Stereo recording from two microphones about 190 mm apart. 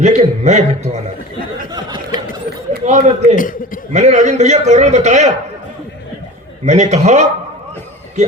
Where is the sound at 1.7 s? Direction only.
20° right (ahead or behind).